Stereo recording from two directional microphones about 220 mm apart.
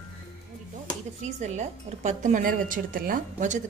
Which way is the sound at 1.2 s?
30° right (ahead or behind).